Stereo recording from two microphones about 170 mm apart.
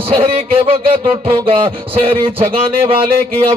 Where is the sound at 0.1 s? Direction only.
35° right (ahead or behind).